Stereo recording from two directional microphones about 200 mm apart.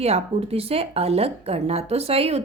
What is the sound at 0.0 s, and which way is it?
A woman's voice, 30° right (ahead or behind).